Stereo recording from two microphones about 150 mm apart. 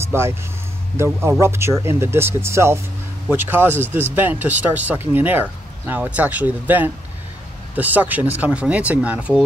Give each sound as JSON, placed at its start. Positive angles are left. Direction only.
{"t": 0.0, "sound": "speech", "side_deg": -15}